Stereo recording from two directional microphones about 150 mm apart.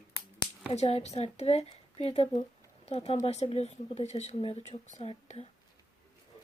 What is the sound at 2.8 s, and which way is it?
Speech, 45° left (ahead or behind).